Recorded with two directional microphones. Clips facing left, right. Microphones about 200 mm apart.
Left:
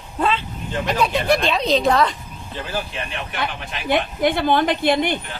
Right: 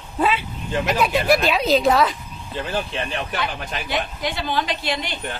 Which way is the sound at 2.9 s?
35° right (ahead or behind).